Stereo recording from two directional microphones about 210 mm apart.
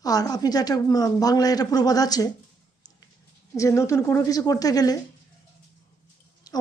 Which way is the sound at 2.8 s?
20° left (ahead or behind).